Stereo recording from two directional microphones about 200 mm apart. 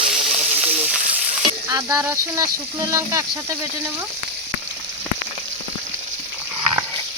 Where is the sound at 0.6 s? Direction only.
5° right (ahead or behind).